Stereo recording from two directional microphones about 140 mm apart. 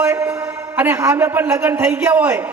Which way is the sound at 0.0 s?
15° right (ahead or behind).